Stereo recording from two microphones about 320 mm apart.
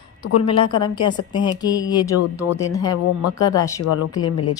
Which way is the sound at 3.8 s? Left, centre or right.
Left.